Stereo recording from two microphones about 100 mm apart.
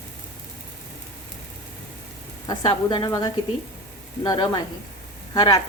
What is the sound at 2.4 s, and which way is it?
A woman's voice, 45° left (ahead or behind).